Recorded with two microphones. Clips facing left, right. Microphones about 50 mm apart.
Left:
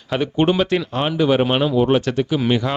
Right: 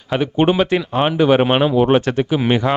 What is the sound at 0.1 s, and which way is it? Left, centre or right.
Speech, centre.